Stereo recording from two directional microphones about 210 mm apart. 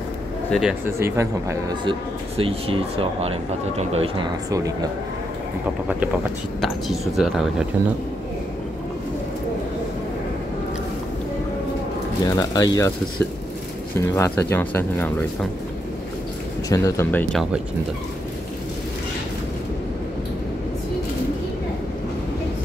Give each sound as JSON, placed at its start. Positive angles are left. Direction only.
{"t": 0.5, "sound": "speech", "side_deg": -5}
{"t": 4.5, "sound": "speech", "side_deg": -15}
{"t": 6.6, "sound": "speech", "side_deg": 0}
{"t": 12.3, "sound": "speech", "side_deg": 15}
{"t": 16.6, "sound": "speech", "side_deg": 15}